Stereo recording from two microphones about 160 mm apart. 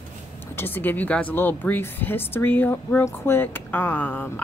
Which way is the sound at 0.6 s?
15° left (ahead or behind).